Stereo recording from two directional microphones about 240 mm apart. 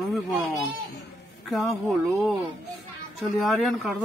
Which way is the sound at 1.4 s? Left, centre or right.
Centre.